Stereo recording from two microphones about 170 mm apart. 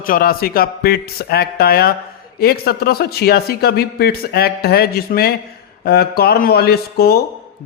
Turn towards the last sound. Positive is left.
turn(degrees=65)  # may be behind; listen again after turning